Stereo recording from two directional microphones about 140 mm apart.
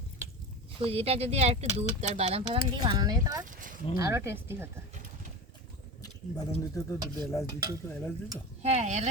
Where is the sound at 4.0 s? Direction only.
20° right (ahead or behind).